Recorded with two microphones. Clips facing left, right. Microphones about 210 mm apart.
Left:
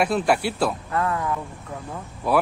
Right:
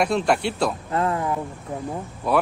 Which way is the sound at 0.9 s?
25° right (ahead or behind).